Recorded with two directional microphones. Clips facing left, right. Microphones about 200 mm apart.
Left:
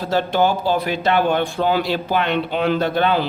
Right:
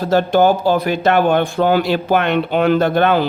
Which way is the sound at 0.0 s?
45° right (ahead or behind).